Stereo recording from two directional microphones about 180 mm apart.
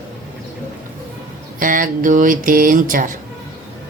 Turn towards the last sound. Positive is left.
turn(degrees=-50)  # may be behind; listen again after turning